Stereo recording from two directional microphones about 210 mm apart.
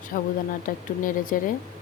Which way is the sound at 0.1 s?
45° left (ahead or behind).